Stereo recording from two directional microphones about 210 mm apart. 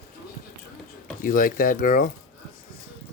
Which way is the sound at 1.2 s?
40° left (ahead or behind).